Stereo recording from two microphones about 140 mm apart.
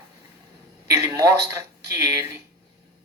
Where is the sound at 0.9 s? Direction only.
25° right (ahead or behind).